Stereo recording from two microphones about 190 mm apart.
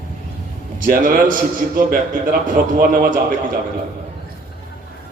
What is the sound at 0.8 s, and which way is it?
A man's voice, 45° right (ahead or behind).